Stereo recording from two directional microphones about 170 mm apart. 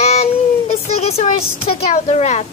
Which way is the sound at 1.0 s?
40° left (ahead or behind).